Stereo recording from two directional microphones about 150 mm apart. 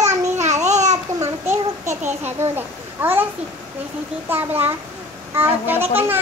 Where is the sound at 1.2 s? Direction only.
20° right (ahead or behind).